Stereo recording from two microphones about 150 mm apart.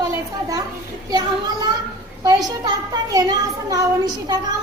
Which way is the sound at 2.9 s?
25° right (ahead or behind).